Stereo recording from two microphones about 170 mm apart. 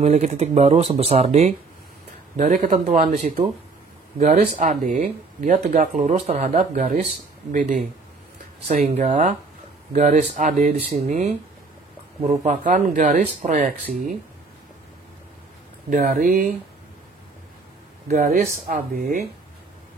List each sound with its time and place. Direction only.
0.0 s speech: 45° right (ahead or behind)
15.9 s speech: 55° right (ahead or behind)
18.0 s speech: 45° right (ahead or behind)